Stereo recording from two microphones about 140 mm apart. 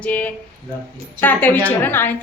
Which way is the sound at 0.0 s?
10° left (ahead or behind).